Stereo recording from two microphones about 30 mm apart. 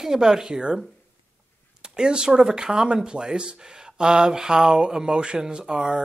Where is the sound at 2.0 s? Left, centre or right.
Right.